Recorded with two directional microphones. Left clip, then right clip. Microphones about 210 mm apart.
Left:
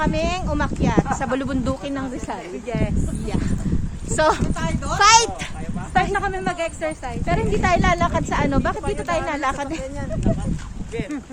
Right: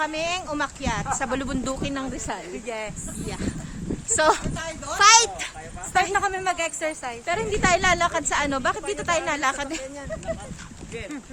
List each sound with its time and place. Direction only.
0.0 s speech: 10° left (ahead or behind); by 2.4 s 5° right (ahead or behind)
2.6 s speech: 15° right (ahead or behind)
4.1 s speech: centre (ahead or behind)
5.9 s a woman's voice: 25° right (ahead or behind)
7.3 s speech: 5° right (ahead or behind)